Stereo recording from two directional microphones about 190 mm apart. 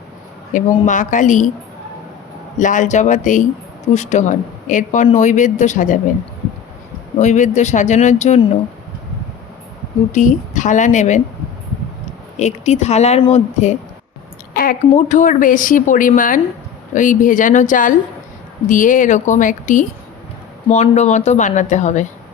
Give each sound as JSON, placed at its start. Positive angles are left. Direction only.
{"t": 0.5, "sound": "a woman's voice", "side_deg": 40}
{"t": 2.6, "sound": "a woman's voice", "side_deg": 40}
{"t": 7.2, "sound": "a woman's voice", "side_deg": 40}
{"t": 10.1, "sound": "a woman's voice", "side_deg": 40}
{"t": 12.4, "sound": "a woman's voice", "side_deg": 35}
{"t": 14.5, "sound": "a woman's voice", "side_deg": 50}